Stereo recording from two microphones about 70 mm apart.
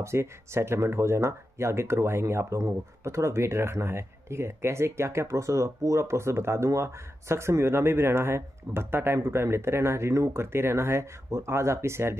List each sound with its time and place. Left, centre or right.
0.0 s speech: right